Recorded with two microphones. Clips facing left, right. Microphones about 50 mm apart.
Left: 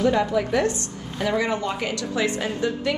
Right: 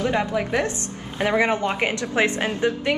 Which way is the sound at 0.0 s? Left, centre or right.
Right.